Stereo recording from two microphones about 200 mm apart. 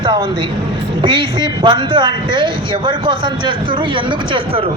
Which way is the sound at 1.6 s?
25° right (ahead or behind).